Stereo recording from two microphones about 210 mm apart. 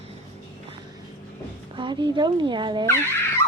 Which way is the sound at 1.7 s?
20° right (ahead or behind).